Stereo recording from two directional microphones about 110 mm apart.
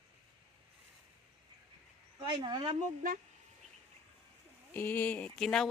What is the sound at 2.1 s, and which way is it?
Speech, 40° right (ahead or behind).